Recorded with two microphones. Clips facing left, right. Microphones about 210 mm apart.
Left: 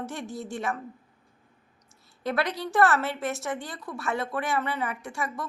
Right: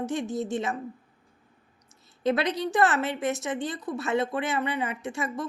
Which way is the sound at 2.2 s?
20° right (ahead or behind).